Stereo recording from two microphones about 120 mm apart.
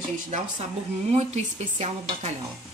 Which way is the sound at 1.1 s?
60° right (ahead or behind).